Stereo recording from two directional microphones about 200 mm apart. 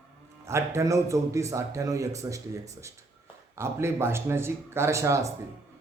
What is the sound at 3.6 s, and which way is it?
Speech, 10° right (ahead or behind).